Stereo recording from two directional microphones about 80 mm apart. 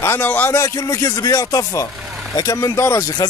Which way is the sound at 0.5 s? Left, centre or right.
Left.